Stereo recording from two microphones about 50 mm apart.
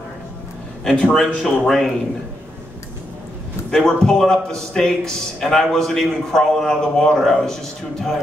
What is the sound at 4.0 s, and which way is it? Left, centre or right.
A man's voice, centre.